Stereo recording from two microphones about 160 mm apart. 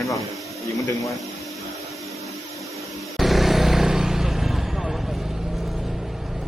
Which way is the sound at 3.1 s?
Centre (ahead or behind).